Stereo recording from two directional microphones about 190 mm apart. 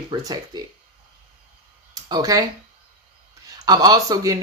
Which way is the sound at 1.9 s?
20° right (ahead or behind).